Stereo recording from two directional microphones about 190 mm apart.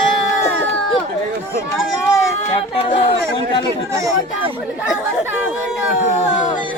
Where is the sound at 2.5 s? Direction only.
30° left (ahead or behind).